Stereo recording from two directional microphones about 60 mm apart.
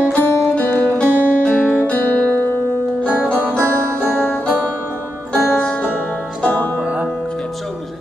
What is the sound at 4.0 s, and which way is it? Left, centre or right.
Music, centre.